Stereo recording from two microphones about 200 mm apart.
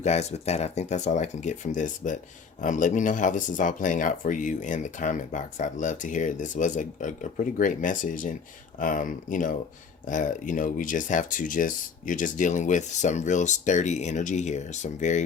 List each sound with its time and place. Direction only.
0.0 s speech: 35° left (ahead or behind)